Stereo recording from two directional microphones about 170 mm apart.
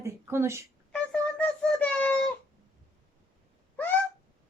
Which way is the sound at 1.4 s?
10° left (ahead or behind).